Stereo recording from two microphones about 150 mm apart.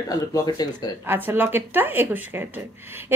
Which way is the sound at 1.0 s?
15° right (ahead or behind).